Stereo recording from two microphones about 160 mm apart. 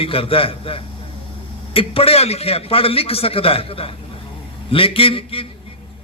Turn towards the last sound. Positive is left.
turn(degrees=35)  # may be behind; listen again after turning